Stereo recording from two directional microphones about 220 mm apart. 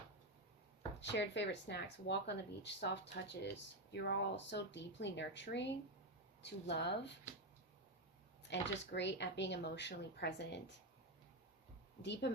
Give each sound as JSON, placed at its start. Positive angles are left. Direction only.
{"t": 1.1, "sound": "speech", "side_deg": 50}
{"t": 8.4, "sound": "speech", "side_deg": 55}
{"t": 12.0, "sound": "speech", "side_deg": 50}